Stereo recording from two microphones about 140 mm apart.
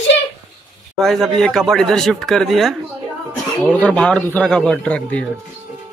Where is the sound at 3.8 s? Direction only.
5° left (ahead or behind).